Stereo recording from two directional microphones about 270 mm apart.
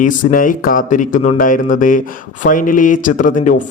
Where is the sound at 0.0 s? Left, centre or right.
Left.